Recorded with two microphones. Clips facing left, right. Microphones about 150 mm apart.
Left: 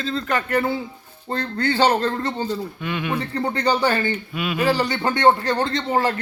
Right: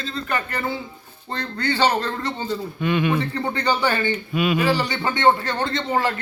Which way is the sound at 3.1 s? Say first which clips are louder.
Even; 35° left (ahead or behind).